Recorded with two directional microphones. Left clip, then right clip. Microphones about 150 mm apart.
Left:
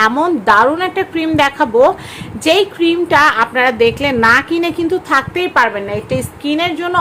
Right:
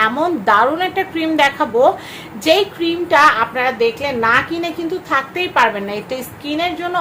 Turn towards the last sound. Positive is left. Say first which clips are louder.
# left 3 dB
turn(degrees=45)  # may be behind; listen again after turning